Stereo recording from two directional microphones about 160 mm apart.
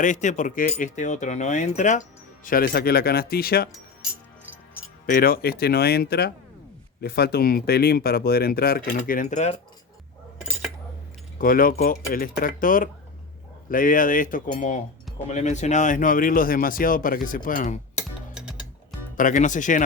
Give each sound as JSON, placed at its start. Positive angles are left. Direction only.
{"t": 0.0, "sound": "speech", "side_deg": 50}
{"t": 5.0, "sound": "speech", "side_deg": 65}
{"t": 11.3, "sound": "speech", "side_deg": 60}
{"t": 18.3, "sound": "music", "side_deg": -5}
{"t": 19.1, "sound": "speech", "side_deg": 55}